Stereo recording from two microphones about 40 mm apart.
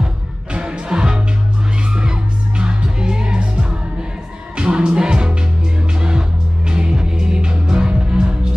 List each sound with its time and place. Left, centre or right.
0.0 s music: right